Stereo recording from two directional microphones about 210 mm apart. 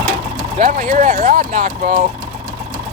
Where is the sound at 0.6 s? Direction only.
40° right (ahead or behind).